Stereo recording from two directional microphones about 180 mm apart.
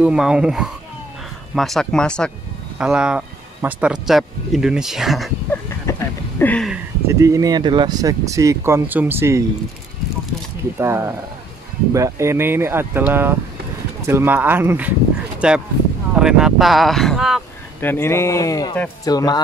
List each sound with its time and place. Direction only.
0.0 s speech: 5° right (ahead or behind)
5.5 s a sound: 15° left (ahead or behind)
7.1 s speech: 15° right (ahead or behind)
10.8 s speech: 15° right (ahead or behind)
17.7 s speech: 10° left (ahead or behind)